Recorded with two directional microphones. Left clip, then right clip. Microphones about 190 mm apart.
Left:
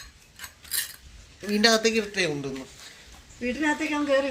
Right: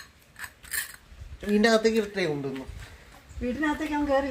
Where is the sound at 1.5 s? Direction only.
30° right (ahead or behind).